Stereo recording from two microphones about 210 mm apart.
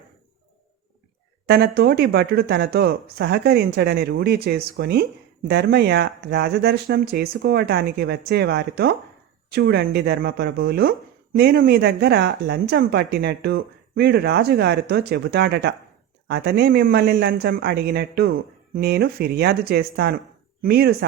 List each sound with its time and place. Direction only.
1.5 s speech: 50° right (ahead or behind)